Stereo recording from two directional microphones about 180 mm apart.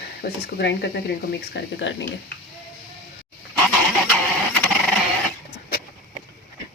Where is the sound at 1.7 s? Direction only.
80° left.